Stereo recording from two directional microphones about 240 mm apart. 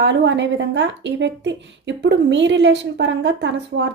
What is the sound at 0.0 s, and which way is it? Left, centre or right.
Speech, right.